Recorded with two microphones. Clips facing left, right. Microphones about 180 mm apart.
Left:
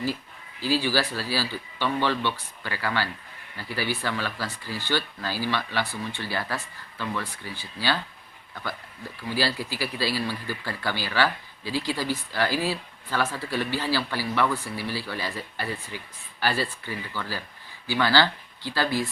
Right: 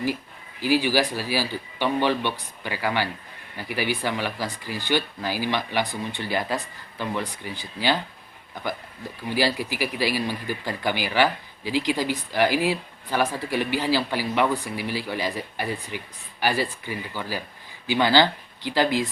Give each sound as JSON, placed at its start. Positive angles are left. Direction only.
{"t": 0.6, "sound": "speech", "side_deg": -15}